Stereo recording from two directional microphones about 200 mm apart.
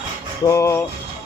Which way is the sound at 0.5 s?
15° left (ahead or behind).